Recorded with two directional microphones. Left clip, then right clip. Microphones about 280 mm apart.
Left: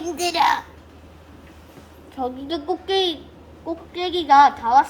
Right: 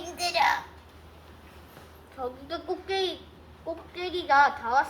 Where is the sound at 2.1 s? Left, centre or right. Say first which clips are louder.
Left 8 dB; left.